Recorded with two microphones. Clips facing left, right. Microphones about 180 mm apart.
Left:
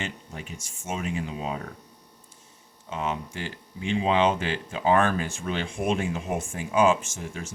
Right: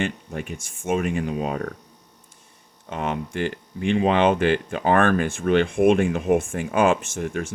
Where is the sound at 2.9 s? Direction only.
55° right (ahead or behind).